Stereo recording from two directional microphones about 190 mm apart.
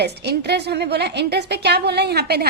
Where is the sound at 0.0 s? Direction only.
60° right (ahead or behind).